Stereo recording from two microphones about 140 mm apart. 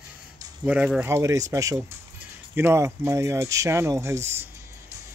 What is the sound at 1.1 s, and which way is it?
Speech, 20° right (ahead or behind).